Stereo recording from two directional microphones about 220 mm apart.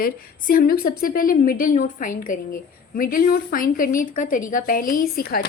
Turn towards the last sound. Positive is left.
turn(degrees=45)  # may be behind; listen again after turning